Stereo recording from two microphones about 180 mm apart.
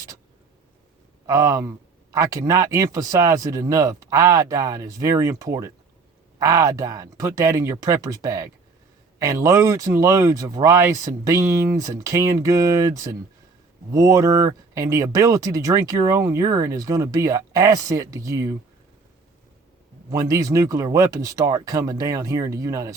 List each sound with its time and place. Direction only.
1.3 s speech: 20° right (ahead or behind)
20.1 s speech: 20° right (ahead or behind)